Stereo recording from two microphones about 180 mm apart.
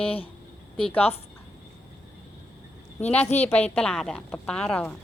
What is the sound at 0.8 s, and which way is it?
Speech, 5° left (ahead or behind).